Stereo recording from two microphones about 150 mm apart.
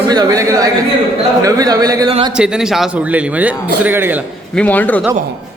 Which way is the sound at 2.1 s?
35° right (ahead or behind).